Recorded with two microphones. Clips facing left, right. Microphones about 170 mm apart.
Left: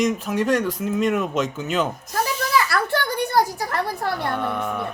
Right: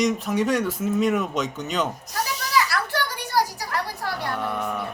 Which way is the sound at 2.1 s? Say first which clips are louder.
Left 3 dB; 50° left (ahead or behind).